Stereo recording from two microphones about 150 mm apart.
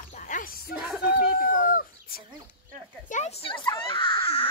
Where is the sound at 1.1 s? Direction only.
80° left.